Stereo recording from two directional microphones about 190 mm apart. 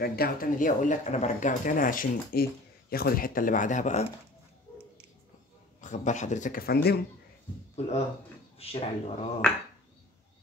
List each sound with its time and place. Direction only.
0.0 s speech: 50° left (ahead or behind); by 4.1 s 35° left (ahead or behind)
5.8 s speech: 40° left (ahead or behind); by 7.0 s 55° left (ahead or behind)
8.5 s speech: 30° left (ahead or behind)
9.4 s speech: 5° left (ahead or behind)